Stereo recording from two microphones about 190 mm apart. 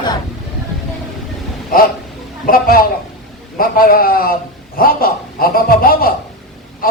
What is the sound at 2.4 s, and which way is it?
A man's voice, 50° left (ahead or behind).